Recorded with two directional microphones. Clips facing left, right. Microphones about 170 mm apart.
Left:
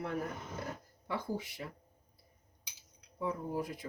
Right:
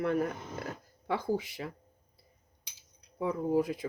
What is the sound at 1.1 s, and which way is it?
Speech, 90° right.